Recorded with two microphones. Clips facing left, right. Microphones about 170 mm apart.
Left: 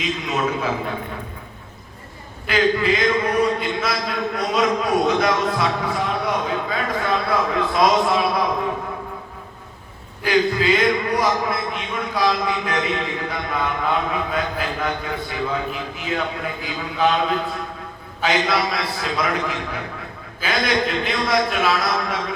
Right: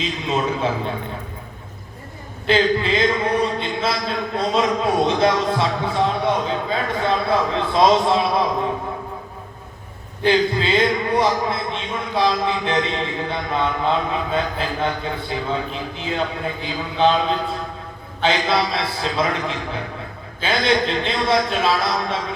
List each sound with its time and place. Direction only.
0.3 s speech: 25° right (ahead or behind)
2.5 s speech: 30° right (ahead or behind)
10.2 s speech: 30° right (ahead or behind)